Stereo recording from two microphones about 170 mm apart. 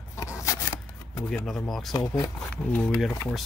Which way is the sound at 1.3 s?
5° left (ahead or behind).